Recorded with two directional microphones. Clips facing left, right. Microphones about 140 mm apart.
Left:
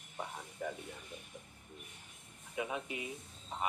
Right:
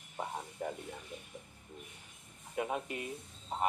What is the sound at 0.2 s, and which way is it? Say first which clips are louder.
Music: right 3 dB; 50° right (ahead or behind).